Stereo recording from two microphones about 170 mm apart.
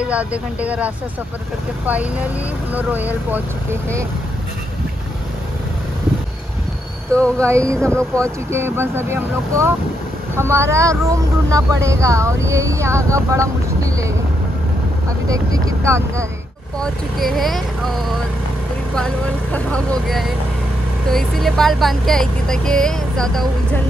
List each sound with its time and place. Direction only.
0.1 s speech: 10° right (ahead or behind)
7.1 s speech: 5° left (ahead or behind)
7.4 s speech: 15° right (ahead or behind)
15.2 s speech: 20° right (ahead or behind)
16.8 s speech: centre (ahead or behind)
18.9 s speech: 5° left (ahead or behind)